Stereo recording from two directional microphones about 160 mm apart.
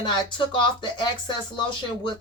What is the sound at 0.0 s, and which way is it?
Speech, 30° left (ahead or behind).